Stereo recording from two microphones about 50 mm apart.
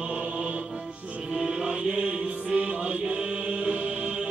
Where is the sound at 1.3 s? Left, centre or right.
Centre.